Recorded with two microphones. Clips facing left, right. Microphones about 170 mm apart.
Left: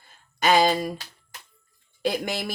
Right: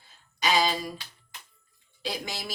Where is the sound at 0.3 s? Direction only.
55° left (ahead or behind).